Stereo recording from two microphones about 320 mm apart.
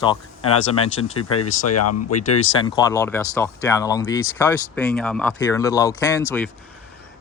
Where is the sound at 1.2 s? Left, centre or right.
Left.